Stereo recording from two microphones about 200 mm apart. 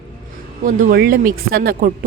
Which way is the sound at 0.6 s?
45° right (ahead or behind).